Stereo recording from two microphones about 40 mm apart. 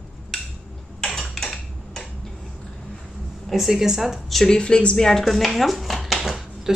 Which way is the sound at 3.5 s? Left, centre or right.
Centre.